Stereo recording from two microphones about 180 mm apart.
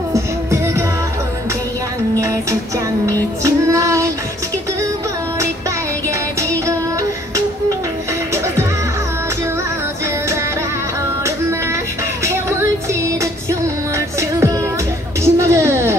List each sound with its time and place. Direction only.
0.1 s music: 15° right (ahead or behind)
3.4 s child singing: 15° right (ahead or behind)
12.3 s music: 15° right (ahead or behind)
15.2 s a sound: 15° right (ahead or behind)